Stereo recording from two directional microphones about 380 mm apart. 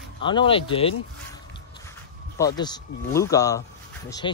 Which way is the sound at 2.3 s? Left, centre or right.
Centre.